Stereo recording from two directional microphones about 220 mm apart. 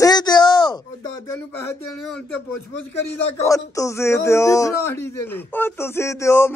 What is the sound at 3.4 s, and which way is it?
Speech, 15° left (ahead or behind).